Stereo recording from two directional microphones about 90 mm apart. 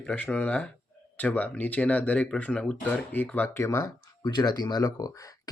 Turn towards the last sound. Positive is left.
turn(degrees=40)  # may be behind; listen again after turning